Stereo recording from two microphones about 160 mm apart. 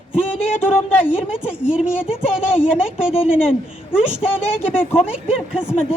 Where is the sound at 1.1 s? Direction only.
5° right (ahead or behind).